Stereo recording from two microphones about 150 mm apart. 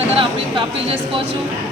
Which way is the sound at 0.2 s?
35° right (ahead or behind).